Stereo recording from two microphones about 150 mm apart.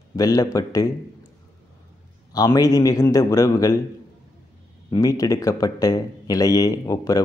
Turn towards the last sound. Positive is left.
turn(degrees=25)  # may be behind; listen again after turning